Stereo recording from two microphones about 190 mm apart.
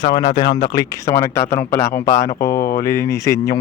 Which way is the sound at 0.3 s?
20° left (ahead or behind).